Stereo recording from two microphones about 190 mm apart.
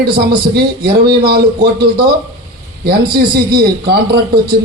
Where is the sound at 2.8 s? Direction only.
55° right (ahead or behind).